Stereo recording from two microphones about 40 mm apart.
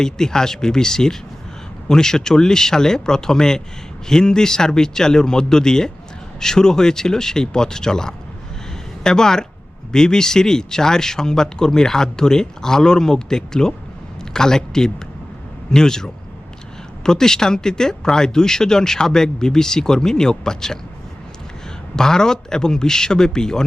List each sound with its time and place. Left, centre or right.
0.0 s speech: centre
21.9 s speech: centre